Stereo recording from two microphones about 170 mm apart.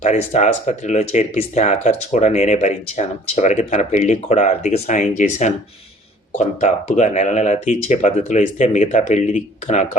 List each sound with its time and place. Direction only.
0.0 s speech: 45° left (ahead or behind)